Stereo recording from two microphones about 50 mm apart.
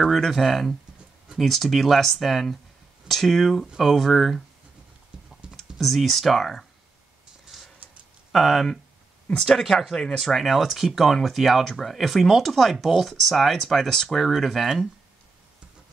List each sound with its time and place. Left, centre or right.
0.1 s speech: centre
5.4 s typing: centre
5.8 s speech: centre
7.5 s a sound: centre
8.3 s speech: centre